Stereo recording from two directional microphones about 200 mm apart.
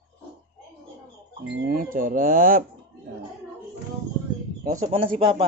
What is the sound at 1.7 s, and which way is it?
Speech, 45° right (ahead or behind).